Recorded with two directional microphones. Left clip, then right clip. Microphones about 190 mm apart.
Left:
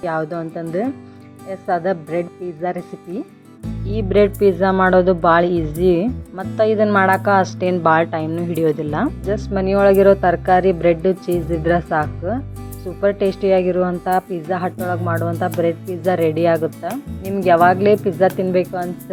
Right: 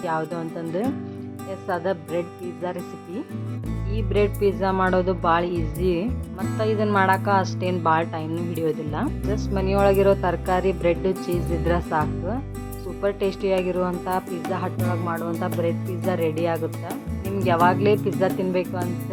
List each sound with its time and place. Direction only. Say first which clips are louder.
0.0 s speech: left 4 dB; 15° left (ahead or behind)
3.8 s a woman's voice: left 8 dB; 30° left (ahead or behind)